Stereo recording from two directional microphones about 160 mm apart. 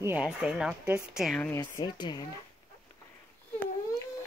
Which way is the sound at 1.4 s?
20° left (ahead or behind).